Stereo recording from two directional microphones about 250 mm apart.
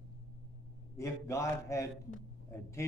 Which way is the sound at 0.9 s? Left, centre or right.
Centre.